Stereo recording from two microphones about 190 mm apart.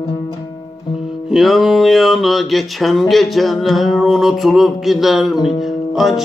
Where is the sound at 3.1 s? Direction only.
Centre (ahead or behind).